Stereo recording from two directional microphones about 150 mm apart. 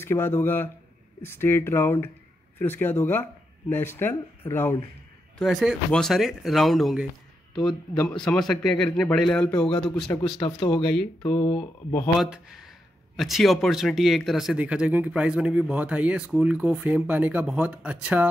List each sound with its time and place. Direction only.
0.0 s speech: 15° left (ahead or behind)
5.4 s speech: centre (ahead or behind)
10.1 s speech: 30° left (ahead or behind)
13.1 s speech: centre (ahead or behind)